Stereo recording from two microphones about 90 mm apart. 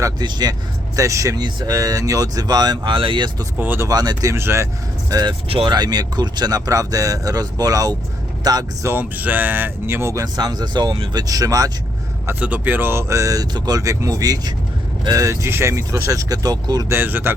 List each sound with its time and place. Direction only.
0.2 s speech: 50° right (ahead or behind)
0.9 s speech: 35° right (ahead or behind)
1.4 s speech: 55° right (ahead or behind)
1.7 s speech: 40° right (ahead or behind); by 3.2 s 65° right (ahead or behind)
3.6 s speech: 25° right (ahead or behind)
3.8 s speech: 50° right (ahead or behind)
4.3 s speech: 30° right (ahead or behind)
5.0 s speech: 45° right (ahead or behind)
5.5 s speech: 90° right
5.7 s speech: 50° right (ahead or behind)
8.8 s speech: 25° right (ahead or behind)
10.2 s speech: 45° right (ahead or behind)
12.4 s speech: 15° right (ahead or behind); by 16.8 s 45° right (ahead or behind)
16.9 s speech: 25° right (ahead or behind)